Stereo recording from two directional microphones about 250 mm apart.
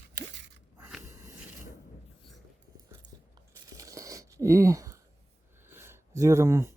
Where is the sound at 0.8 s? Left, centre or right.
Centre.